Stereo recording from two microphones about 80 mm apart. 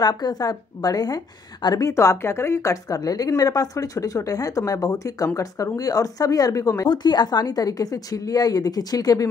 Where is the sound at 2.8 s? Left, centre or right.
Left.